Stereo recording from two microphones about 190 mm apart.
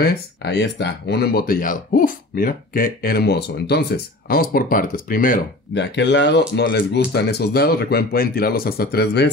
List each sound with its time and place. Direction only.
0.0 s speech: 55° left (ahead or behind)
5.8 s speech: 65° left (ahead or behind)